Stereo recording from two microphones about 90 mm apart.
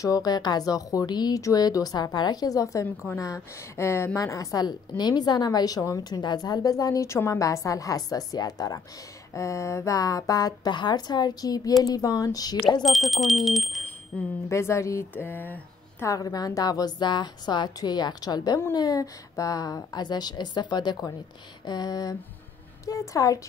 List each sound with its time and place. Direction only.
0.0 s a woman's voice: 45° left (ahead or behind)
4.6 s a woman's voice: 50° left (ahead or behind)
12.8 s speech: centre (ahead or behind)
14.1 s speech: 15° left (ahead or behind)
14.5 s speech: 30° left (ahead or behind)
16.1 s a woman's voice: 40° left (ahead or behind)